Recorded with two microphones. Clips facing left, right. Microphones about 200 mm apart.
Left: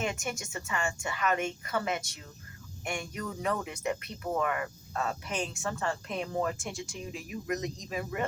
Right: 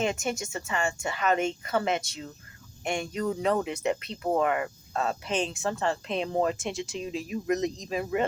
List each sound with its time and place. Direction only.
0.0 s speech: 25° right (ahead or behind)